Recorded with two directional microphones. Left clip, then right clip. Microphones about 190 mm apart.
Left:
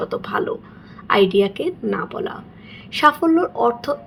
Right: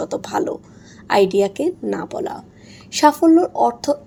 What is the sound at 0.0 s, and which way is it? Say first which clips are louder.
A woman's voice: right 1 dB; 40° right (ahead or behind).